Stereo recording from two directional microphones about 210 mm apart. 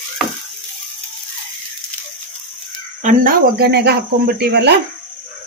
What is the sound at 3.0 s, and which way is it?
Speech, 40° right (ahead or behind).